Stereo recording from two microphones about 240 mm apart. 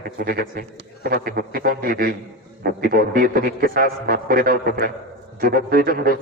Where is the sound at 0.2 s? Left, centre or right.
Right.